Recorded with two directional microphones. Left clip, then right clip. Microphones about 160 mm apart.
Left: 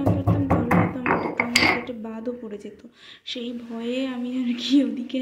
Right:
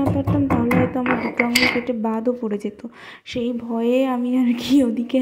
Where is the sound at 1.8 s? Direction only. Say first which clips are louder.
Right 10 dB; 60° right (ahead or behind).